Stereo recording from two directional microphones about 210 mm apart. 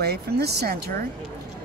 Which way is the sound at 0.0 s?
50° right (ahead or behind).